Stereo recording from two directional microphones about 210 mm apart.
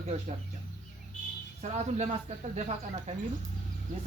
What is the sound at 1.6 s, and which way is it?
Speech, 30° right (ahead or behind).